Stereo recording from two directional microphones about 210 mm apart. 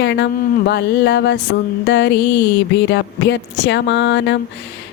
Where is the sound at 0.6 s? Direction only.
55° left (ahead or behind).